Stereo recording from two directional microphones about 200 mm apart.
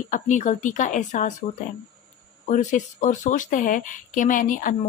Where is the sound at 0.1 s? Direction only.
35° left (ahead or behind).